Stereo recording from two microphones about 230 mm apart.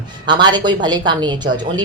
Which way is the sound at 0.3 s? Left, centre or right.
Centre.